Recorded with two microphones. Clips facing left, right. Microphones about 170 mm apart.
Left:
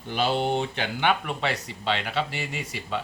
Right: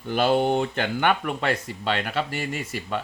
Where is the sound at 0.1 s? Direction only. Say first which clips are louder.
Right 4 dB; 50° right (ahead or behind).